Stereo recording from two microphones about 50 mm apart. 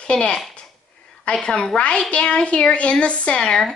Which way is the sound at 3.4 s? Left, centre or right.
Centre.